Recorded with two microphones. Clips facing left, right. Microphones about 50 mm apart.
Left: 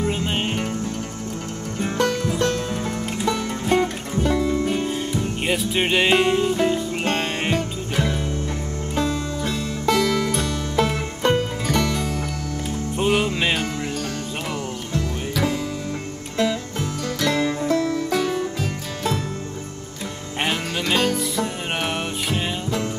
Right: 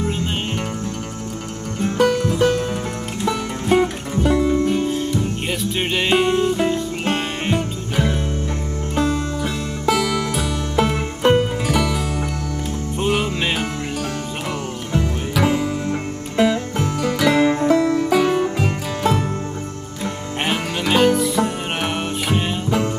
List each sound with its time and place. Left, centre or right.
0.0 s music: centre
2.0 s music: centre
4.6 s music: centre
15.4 s music: right
17.4 s music: right
18.3 s music: right
20.4 s music: centre